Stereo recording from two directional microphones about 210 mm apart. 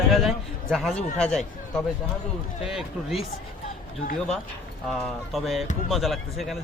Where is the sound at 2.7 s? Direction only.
Centre (ahead or behind).